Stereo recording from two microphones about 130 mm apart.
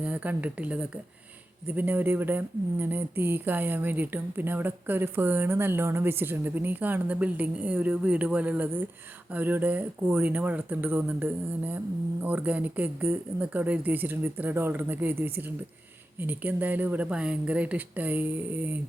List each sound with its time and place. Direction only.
0.0 s speech: 10° right (ahead or behind)